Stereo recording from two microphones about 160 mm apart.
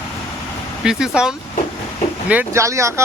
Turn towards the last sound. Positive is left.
turn(degrees=-20)  # may be behind; listen again after turning